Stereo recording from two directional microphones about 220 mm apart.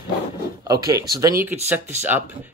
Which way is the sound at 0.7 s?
15° right (ahead or behind).